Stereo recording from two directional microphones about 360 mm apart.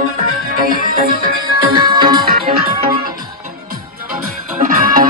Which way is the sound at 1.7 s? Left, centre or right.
Centre.